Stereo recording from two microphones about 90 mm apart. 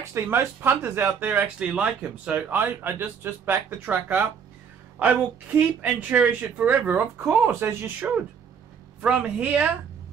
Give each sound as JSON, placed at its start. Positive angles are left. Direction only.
{"t": 0.0, "sound": "speech", "side_deg": -30}
{"t": 2.6, "sound": "a woman's voice", "side_deg": -25}